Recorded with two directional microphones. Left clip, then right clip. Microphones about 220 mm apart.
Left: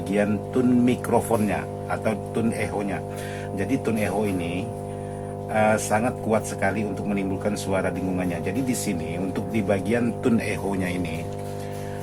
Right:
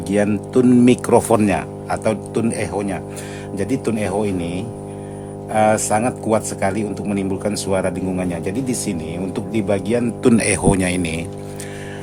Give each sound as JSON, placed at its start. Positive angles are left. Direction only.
{"t": 0.1, "sound": "speech", "side_deg": -45}